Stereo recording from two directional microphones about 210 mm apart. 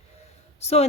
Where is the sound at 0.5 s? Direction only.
30° left (ahead or behind).